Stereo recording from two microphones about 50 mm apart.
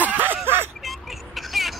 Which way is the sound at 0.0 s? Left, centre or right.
Right.